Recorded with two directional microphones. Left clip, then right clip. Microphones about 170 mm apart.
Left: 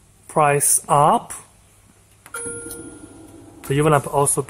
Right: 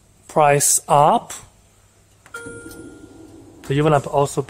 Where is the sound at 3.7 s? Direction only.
15° right (ahead or behind).